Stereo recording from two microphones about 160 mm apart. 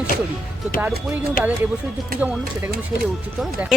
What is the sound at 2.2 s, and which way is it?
Speech, 10° right (ahead or behind).